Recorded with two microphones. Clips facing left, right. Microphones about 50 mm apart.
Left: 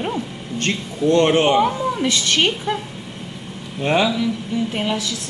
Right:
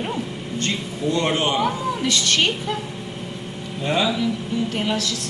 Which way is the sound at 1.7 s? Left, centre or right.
Left.